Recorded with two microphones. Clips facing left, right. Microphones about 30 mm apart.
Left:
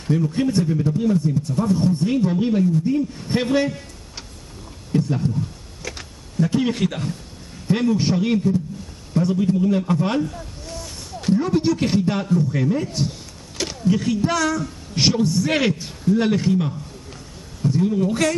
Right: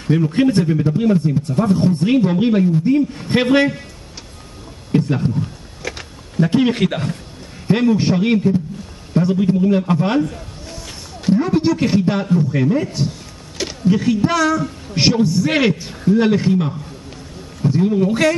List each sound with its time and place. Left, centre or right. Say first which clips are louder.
0.1 s a man's voice: right 5 dB; right
0.7 s a man's voice: right 4 dB; right
1.8 s a man's voice: right 4 dB; right
4.9 s speech: right 4 dB; right
5.8 s a sound: right 5 dB; right
6.3 s a man's voice: right 5 dB; right
10.3 s a sound: right 1 dB; centre
11.5 s a man's voice: right 3 dB; centre
15.2 s a man's voice: right 3 dB; centre
15.5 s a man's voice: right 4 dB; right
17.6 s a man's voice: right 4 dB; right